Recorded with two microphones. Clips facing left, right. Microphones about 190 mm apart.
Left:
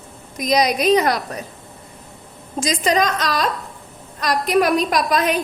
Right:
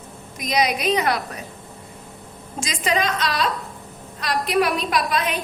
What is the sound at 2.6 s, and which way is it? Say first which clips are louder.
A woman's voice: left 4 dB; 40° left (ahead or behind).